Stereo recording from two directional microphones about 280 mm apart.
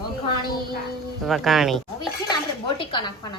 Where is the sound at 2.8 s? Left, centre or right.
Centre.